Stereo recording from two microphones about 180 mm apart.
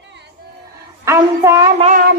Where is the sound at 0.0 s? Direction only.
75° right (ahead or behind).